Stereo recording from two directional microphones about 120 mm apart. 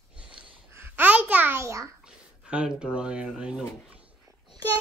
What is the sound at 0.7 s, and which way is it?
Babbling, 20° right (ahead or behind).